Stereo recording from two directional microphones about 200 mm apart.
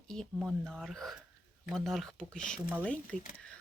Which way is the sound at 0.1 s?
Centre (ahead or behind).